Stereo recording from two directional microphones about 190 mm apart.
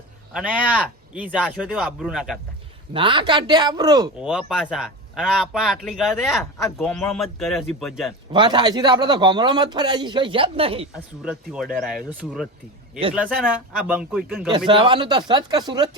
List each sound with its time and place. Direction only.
0.5 s a man's voice: 5° right (ahead or behind)
2.9 s a man's voice: 25° right (ahead or behind)
4.2 s a man's voice: 5° right (ahead or behind)
8.3 s a man's voice: 25° right (ahead or behind)
11.2 s a man's voice: 5° right (ahead or behind)
13.5 s a man's voice: 5° right (ahead or behind)
14.7 s a man's voice: 25° right (ahead or behind)